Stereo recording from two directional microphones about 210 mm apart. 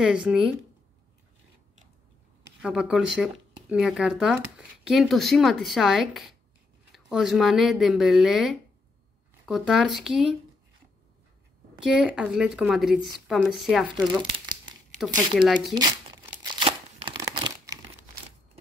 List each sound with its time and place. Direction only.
0.0 s speech: 5° right (ahead or behind)
2.4 s speech: 5° right (ahead or behind)
11.8 s speech: centre (ahead or behind)
14.0 s crumpling: 20° right (ahead or behind)
15.0 s speech: centre (ahead or behind)
15.7 s crumpling: 20° right (ahead or behind)
16.6 s tearing: 25° right (ahead or behind)